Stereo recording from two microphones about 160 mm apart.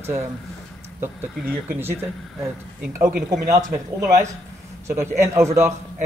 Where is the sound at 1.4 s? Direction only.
10° right (ahead or behind).